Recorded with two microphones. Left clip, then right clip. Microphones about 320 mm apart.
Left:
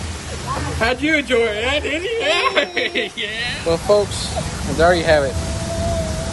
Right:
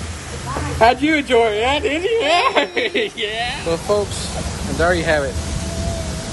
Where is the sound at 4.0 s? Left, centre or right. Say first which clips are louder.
Left 2 dB; centre.